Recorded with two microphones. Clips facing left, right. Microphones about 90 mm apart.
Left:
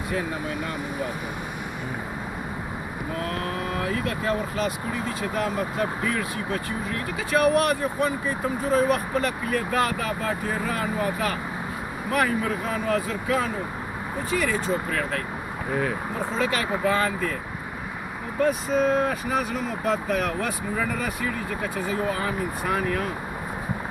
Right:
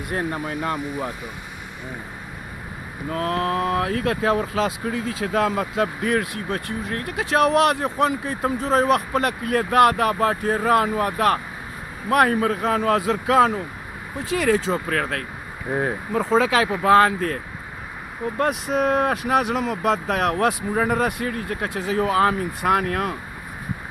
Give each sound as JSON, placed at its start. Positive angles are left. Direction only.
{"t": 3.1, "sound": "speech", "side_deg": -60}
{"t": 16.2, "sound": "speech", "side_deg": -90}
{"t": 18.4, "sound": "speech", "side_deg": -70}
{"t": 20.7, "sound": "speech", "side_deg": -55}